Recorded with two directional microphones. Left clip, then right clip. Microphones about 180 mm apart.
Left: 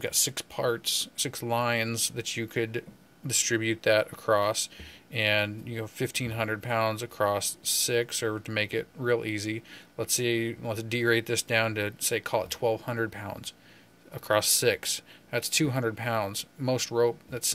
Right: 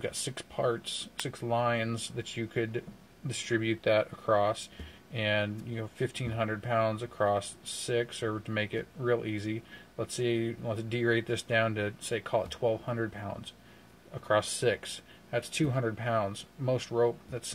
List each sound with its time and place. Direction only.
0.0 s speech: 10° left (ahead or behind)